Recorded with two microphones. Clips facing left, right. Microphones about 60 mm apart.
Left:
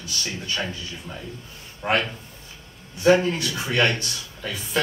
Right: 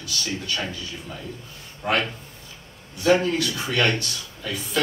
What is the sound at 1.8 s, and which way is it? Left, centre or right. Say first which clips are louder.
A man's voice: left 1 dB; left.